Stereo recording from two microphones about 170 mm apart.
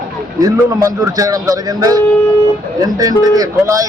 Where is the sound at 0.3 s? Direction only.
20° right (ahead or behind).